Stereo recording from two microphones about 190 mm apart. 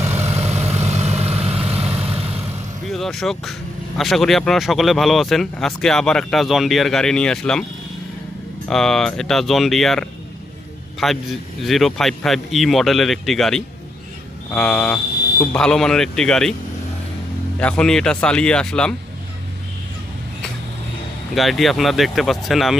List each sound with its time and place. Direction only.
0.2 s vehicle: 35° right (ahead or behind)
2.8 s speech: centre (ahead or behind)
8.6 s speech: 5° left (ahead or behind)
17.6 s speech: 5° left (ahead or behind)
21.3 s speech: centre (ahead or behind)